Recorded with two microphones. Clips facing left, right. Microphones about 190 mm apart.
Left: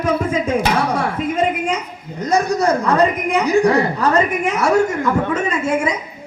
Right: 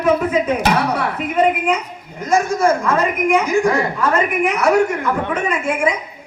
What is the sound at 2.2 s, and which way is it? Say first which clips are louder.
A woman's voice: right 1 dB; 40° left (ahead or behind).